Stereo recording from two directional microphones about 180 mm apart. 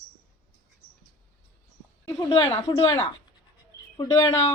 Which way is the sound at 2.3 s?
30° left (ahead or behind).